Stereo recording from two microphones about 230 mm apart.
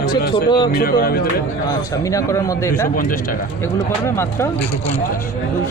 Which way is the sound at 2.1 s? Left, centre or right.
Centre.